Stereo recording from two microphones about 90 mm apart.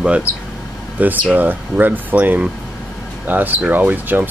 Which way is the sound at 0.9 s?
20° right (ahead or behind).